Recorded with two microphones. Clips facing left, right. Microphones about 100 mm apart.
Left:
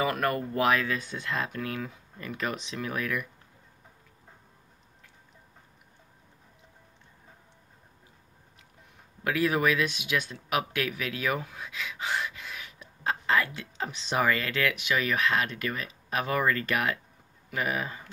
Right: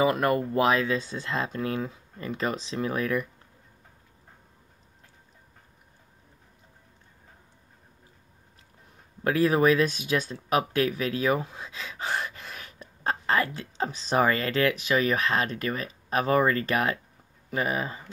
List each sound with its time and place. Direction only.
0.0 s speech: 25° right (ahead or behind)
9.2 s speech: 35° right (ahead or behind)